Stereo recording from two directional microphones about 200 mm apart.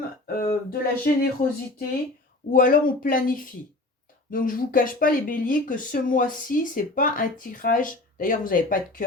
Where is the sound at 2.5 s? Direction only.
45° left (ahead or behind).